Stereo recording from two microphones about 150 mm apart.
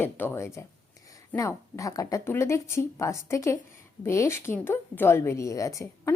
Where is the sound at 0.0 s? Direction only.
15° left (ahead or behind).